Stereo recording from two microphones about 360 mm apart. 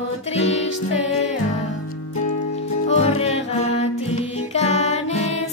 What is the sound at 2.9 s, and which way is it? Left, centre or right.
Music, centre.